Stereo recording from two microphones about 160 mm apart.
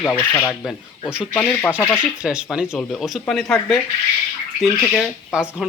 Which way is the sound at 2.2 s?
5° right (ahead or behind).